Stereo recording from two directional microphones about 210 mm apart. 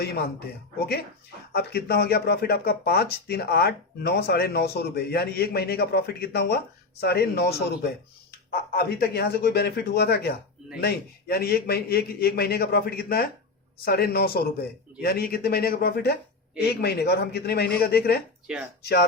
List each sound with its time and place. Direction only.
0.0 s speech: 50° left (ahead or behind)
18.4 s speech: 5° right (ahead or behind)
18.8 s speech: 50° left (ahead or behind)